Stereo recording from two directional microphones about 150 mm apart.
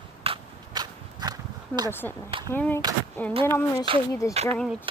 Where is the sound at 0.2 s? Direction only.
40° right (ahead or behind).